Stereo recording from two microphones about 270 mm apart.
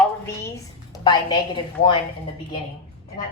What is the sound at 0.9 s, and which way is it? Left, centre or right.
Speech, centre.